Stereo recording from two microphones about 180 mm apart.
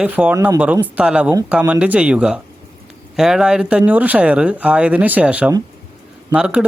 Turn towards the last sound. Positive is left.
turn(degrees=-5)  # may be behind; listen again after turning